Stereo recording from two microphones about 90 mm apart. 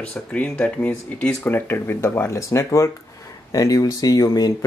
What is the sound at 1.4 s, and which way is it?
Speech, 20° left (ahead or behind).